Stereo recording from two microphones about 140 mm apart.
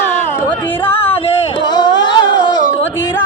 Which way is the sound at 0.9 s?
15° left (ahead or behind).